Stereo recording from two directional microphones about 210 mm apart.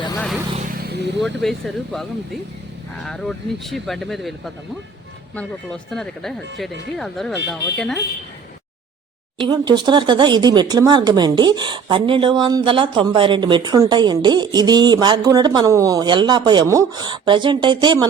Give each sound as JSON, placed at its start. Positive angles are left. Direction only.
{"t": 0.8, "sound": "vehicle", "side_deg": -50}
{"t": 1.2, "sound": "speech", "side_deg": 0}
{"t": 9.5, "sound": "speech", "side_deg": -20}